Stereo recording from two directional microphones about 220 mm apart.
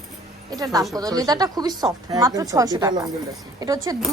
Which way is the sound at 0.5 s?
15° right (ahead or behind).